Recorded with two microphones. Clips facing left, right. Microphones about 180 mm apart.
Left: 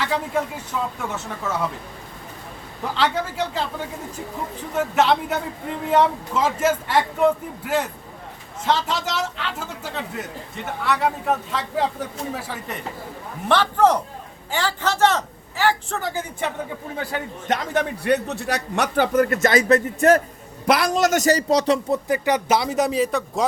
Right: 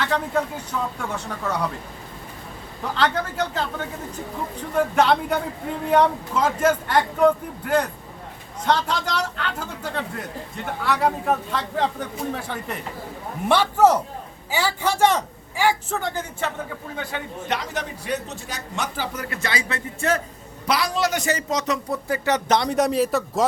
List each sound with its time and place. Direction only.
0.0 s speech: 10° left (ahead or behind)
3.0 s a man's voice: 5° left (ahead or behind)
13.5 s speech: 10° right (ahead or behind)
16.0 s a man's voice: 5° left (ahead or behind)
17.0 s a man's voice: 35° left (ahead or behind)
17.6 s a man's voice: 60° left (ahead or behind); by 23.5 s centre (ahead or behind)